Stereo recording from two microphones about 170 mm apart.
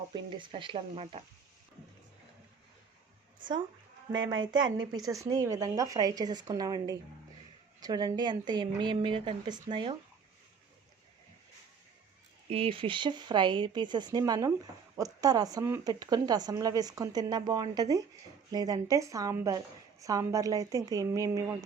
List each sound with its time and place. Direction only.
0.1 s speech: 30° right (ahead or behind)
4.1 s speech: 25° right (ahead or behind)
12.5 s speech: 35° right (ahead or behind)